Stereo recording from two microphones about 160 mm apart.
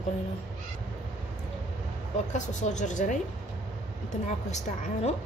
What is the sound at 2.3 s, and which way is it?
Speech, 50° left (ahead or behind).